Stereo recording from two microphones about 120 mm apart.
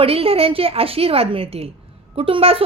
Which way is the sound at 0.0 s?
55° right (ahead or behind).